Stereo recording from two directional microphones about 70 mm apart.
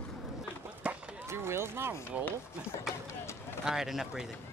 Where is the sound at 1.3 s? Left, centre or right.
Right.